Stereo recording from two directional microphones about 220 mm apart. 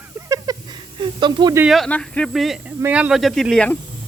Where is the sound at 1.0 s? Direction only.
20° right (ahead or behind).